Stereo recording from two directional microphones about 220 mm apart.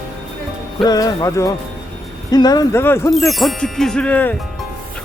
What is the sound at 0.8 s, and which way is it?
Speech, 15° left (ahead or behind).